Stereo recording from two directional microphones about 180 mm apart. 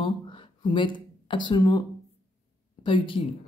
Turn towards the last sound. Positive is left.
turn(degrees=30)  # may be behind; listen again after turning